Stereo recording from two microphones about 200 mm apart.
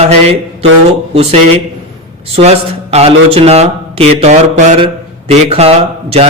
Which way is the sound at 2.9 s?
30° right (ahead or behind).